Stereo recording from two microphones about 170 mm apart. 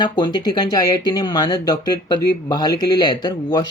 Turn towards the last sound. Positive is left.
turn(degrees=25)  # may be behind; listen again after turning